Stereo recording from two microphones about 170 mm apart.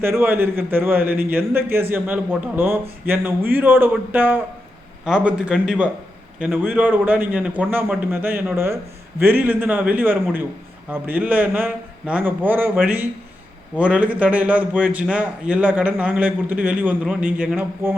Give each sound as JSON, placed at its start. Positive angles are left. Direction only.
{"t": 0.0, "sound": "a man's voice", "side_deg": -10}